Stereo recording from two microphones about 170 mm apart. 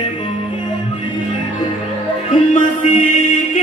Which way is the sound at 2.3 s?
45° left (ahead or behind).